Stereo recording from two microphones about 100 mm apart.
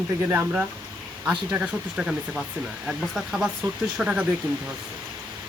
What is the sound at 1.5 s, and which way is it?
A man's voice, 10° right (ahead or behind).